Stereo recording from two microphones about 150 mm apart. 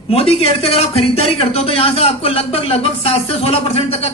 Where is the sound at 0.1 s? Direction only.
40° left (ahead or behind).